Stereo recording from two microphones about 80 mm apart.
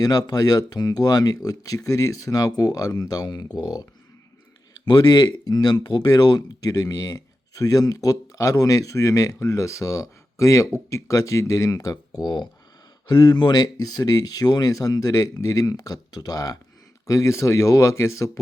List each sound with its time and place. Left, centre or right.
0.0 s speech: left
4.9 s speech: left